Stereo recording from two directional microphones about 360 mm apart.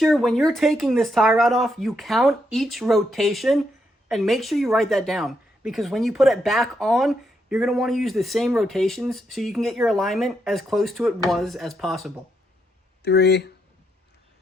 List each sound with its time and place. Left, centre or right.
0.0 s speech: centre
13.0 s speech: left